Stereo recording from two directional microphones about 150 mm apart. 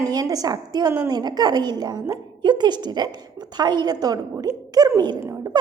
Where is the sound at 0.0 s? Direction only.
25° right (ahead or behind).